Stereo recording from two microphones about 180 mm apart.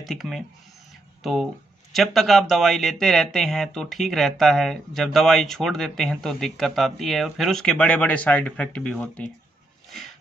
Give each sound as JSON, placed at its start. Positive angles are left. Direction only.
{"t": 0.0, "sound": "speech", "side_deg": 0}